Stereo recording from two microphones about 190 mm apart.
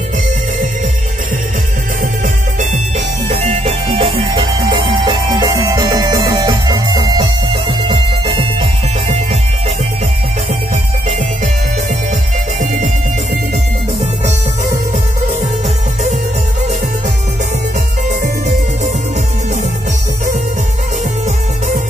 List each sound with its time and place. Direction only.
2.2 s music: 40° right (ahead or behind)
11.1 s music: 40° right (ahead or behind)
12.5 s music: 40° right (ahead or behind)